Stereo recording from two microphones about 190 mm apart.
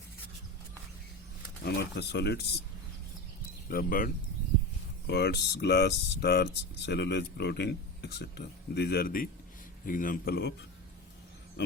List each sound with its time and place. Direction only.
1.6 s speech: 55° left (ahead or behind)
3.7 s a man's voice: 50° left (ahead or behind)
5.0 s a man's voice: 60° left (ahead or behind)